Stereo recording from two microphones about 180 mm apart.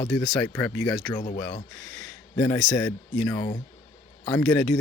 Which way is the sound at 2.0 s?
5° left (ahead or behind).